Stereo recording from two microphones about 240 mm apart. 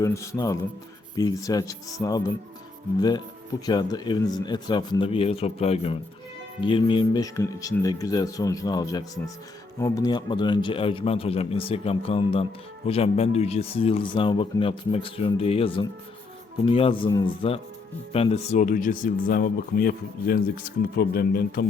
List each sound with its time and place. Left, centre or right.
0.0 s speech: centre
3.7 s speech: centre; by 21.7 s left